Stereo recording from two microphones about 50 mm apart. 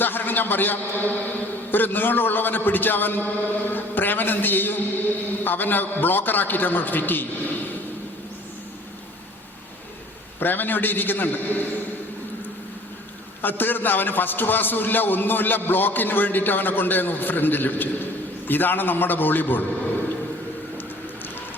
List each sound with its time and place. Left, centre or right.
0.0 s a man's voice: left
10.4 s a man's voice: left
13.4 s a man's voice: left